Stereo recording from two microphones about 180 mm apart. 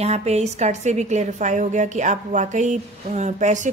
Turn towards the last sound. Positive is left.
turn(degrees=-40)  # may be behind; listen again after turning